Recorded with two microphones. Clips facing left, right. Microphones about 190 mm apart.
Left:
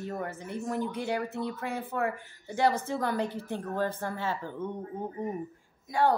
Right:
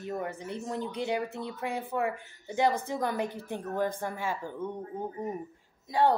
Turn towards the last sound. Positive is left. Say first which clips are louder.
# right 1 dB
turn(degrees=-25)  # may be behind; listen again after turning